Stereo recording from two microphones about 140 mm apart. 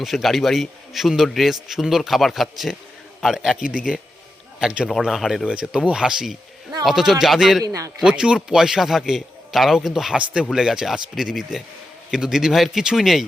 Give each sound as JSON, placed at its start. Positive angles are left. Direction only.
{"t": 0.0, "sound": "a man's voice", "side_deg": 0}
{"t": 4.6, "sound": "a man's voice", "side_deg": -5}
{"t": 7.6, "sound": "a man's voice", "side_deg": -25}
{"t": 7.9, "sound": "a man's voice", "side_deg": -5}